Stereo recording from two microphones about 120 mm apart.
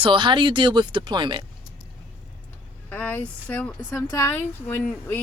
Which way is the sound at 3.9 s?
25° left (ahead or behind).